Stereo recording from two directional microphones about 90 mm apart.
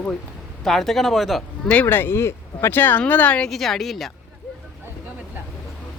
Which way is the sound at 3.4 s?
5° left (ahead or behind).